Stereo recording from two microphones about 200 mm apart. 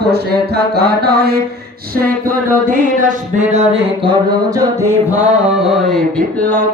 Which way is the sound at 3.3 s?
35° right (ahead or behind).